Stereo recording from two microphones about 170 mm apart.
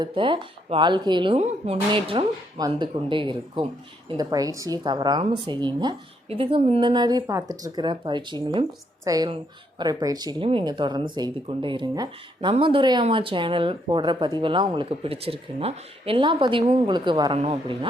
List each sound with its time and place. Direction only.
0.0 s speech: 30° right (ahead or behind)